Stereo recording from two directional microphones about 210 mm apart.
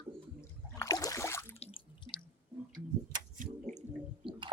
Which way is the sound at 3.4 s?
35° right (ahead or behind).